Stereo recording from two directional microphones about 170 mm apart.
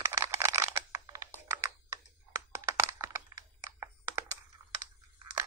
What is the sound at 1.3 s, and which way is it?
Computer keyboard, 15° right (ahead or behind).